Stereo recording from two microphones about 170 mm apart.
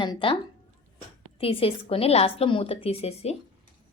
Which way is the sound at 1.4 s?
35° left (ahead or behind).